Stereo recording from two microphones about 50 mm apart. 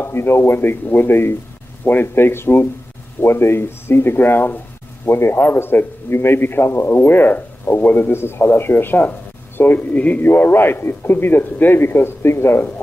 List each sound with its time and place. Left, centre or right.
0.0 s a man's voice: left
5.0 s a man's voice: left
9.8 s speech: left
10.2 s a man's voice: left